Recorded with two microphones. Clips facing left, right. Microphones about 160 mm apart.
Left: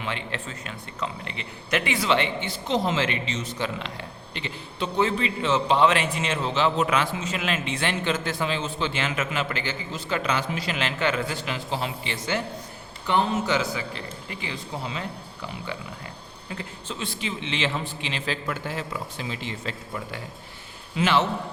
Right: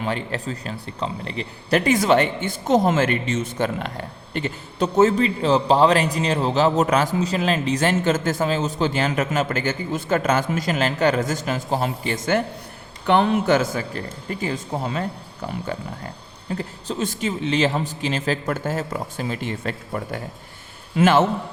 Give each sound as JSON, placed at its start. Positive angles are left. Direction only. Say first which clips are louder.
{"t": 0.0, "sound": "speech", "louder": "right 6 dB", "side_deg": -40}
{"t": 13.1, "sound": "speech", "louder": "right 6 dB", "side_deg": -60}